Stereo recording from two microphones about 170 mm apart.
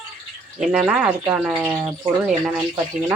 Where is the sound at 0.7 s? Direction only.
5° right (ahead or behind).